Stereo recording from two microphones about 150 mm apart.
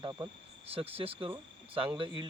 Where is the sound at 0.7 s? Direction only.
40° right (ahead or behind).